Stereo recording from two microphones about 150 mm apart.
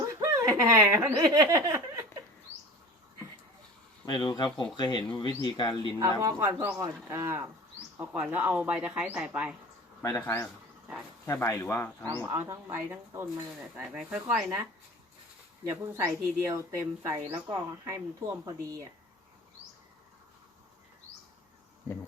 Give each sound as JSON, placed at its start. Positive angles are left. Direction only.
{"t": 0.0, "sound": "speech", "side_deg": -20}
{"t": 4.0, "sound": "speech", "side_deg": 30}
{"t": 6.0, "sound": "speech", "side_deg": -20}
{"t": 10.0, "sound": "speech", "side_deg": 20}
{"t": 12.3, "sound": "speech", "side_deg": -20}
{"t": 15.7, "sound": "speech", "side_deg": -15}